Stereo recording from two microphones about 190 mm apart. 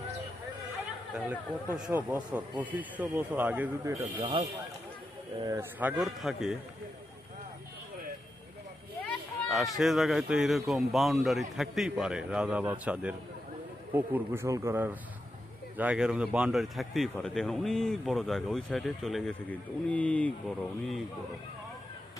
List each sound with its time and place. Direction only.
1.1 s speech: 5° right (ahead or behind)
4.2 s speech: 30° right (ahead or behind)
5.4 s speech: 15° right (ahead or behind)
6.0 s speech: centre (ahead or behind)
9.5 s speech: centre (ahead or behind)